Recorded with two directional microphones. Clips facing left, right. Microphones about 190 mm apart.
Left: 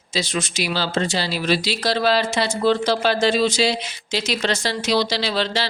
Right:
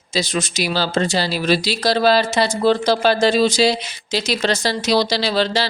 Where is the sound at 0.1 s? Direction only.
40° right (ahead or behind).